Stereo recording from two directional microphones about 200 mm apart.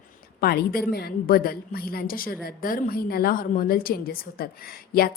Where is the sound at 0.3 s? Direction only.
50° left (ahead or behind).